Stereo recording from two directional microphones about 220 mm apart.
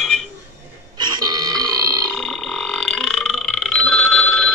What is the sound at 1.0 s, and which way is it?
Burping, 15° right (ahead or behind).